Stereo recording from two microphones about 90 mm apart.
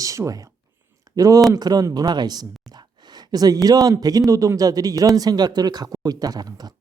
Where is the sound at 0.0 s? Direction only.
40° right (ahead or behind).